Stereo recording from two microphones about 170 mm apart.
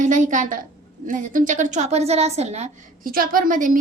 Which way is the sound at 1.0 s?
50° right (ahead or behind).